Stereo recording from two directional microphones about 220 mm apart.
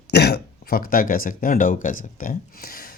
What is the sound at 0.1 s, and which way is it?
Speech, 45° left (ahead or behind).